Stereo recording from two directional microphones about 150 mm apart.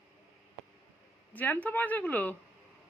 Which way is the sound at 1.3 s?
10° left (ahead or behind).